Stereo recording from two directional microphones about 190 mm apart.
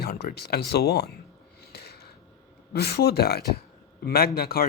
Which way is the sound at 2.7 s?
55° left (ahead or behind).